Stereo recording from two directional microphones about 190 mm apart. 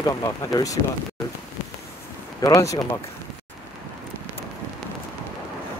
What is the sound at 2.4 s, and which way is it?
Speech, 15° left (ahead or behind).